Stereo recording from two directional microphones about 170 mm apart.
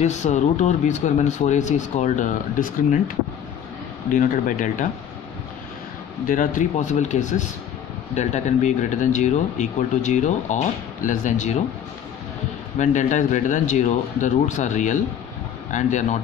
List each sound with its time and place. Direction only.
0.0 s speech: 45° left (ahead or behind)
4.1 s speech: 50° left (ahead or behind)
6.2 s speech: 50° left (ahead or behind)
12.7 s speech: 45° left (ahead or behind)